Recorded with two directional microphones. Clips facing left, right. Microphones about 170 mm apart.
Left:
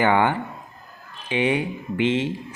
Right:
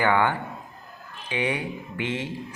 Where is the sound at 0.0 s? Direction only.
20° left (ahead or behind).